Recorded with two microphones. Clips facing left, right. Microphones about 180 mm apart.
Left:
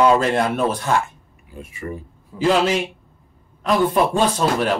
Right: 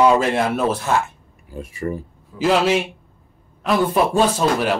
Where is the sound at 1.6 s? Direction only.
40° right (ahead or behind).